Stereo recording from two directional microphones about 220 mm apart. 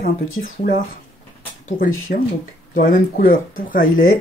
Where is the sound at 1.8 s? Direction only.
40° left (ahead or behind).